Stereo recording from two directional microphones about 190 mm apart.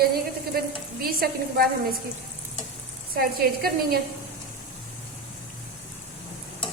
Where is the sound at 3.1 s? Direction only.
55° right (ahead or behind).